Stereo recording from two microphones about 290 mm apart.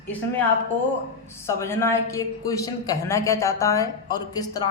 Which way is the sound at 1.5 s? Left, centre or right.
Centre.